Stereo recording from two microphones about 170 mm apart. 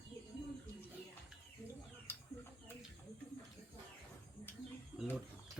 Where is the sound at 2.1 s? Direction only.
15° left (ahead or behind).